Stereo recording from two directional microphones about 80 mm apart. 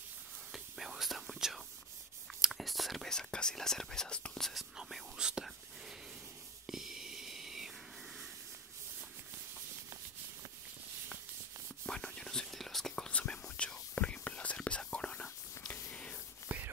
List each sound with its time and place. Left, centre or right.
0.5 s whispering: centre
6.7 s whispering: centre
11.8 s whispering: centre
16.5 s a sound: centre